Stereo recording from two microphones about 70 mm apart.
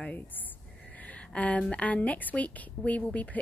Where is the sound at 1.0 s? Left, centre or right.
Left.